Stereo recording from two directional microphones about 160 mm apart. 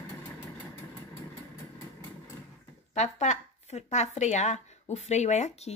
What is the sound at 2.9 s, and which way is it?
Speech, 45° left (ahead or behind).